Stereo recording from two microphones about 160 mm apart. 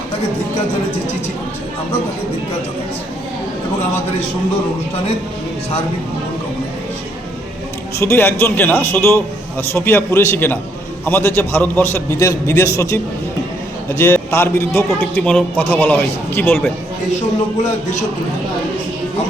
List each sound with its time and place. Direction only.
7.9 s a man's voice: 15° left (ahead or behind)
14.0 s a man's voice: 15° left (ahead or behind)